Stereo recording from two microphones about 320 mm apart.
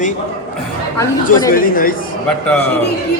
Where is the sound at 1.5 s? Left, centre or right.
Left.